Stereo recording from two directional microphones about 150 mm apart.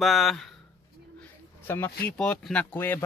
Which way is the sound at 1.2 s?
15° left (ahead or behind).